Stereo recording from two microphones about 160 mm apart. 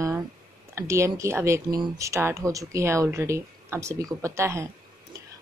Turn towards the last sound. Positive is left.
turn(degrees=-15)  # may be behind; listen again after turning